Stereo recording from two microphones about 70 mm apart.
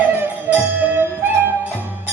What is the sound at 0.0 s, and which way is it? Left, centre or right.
Music, right.